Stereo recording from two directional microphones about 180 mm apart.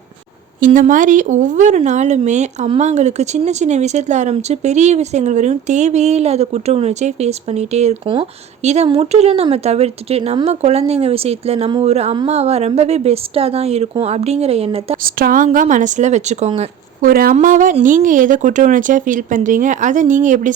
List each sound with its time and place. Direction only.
0.6 s speech: 45° right (ahead or behind)
15.0 s speech: 55° right (ahead or behind)
17.0 s speech: 55° right (ahead or behind)